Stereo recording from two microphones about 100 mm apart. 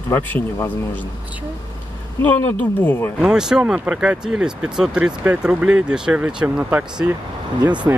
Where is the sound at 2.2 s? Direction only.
20° left (ahead or behind).